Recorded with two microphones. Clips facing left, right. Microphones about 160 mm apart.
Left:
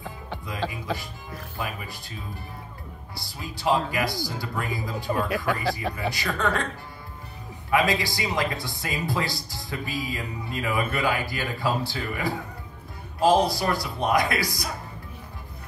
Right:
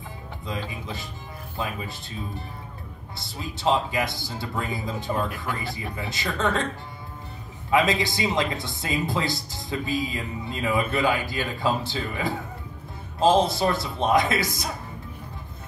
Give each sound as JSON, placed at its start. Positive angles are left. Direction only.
{"t": 1.6, "sound": "speech", "side_deg": -20}
{"t": 3.2, "sound": "speech", "side_deg": -20}
{"t": 5.5, "sound": "speech", "side_deg": 90}
{"t": 5.9, "sound": "speech", "side_deg": -20}
{"t": 7.7, "sound": "speech", "side_deg": -20}